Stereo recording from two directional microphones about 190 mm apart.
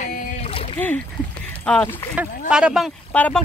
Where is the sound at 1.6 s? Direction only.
10° left (ahead or behind).